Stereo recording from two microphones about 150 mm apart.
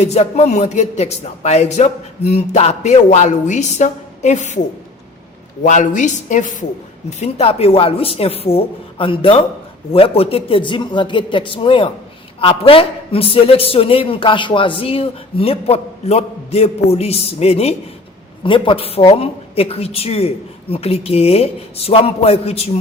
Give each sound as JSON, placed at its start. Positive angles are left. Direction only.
{"t": 0.0, "sound": "speech", "side_deg": 45}
{"t": 5.6, "sound": "speech", "side_deg": 55}
{"t": 7.2, "sound": "a man's voice", "side_deg": 40}